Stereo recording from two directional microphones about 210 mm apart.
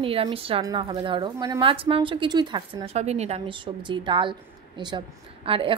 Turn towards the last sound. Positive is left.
turn(degrees=-25)  # may be behind; listen again after turning